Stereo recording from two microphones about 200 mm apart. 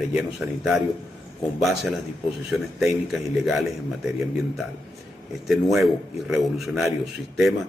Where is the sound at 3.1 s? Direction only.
Centre (ahead or behind).